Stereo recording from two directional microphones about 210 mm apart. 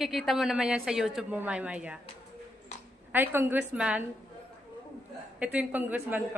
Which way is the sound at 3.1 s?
10° right (ahead or behind).